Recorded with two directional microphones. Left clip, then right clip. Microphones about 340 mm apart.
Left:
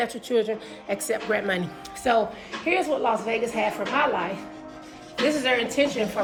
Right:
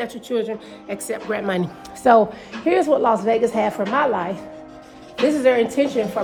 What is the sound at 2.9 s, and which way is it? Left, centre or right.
Speech, right.